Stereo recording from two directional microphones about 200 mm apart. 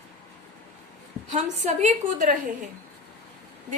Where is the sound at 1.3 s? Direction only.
35° right (ahead or behind).